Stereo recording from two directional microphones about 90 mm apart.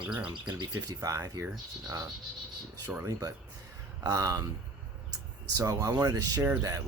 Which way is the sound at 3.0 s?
40° right (ahead or behind).